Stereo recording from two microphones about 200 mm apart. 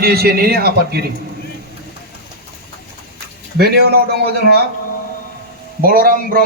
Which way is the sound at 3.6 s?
50° right (ahead or behind).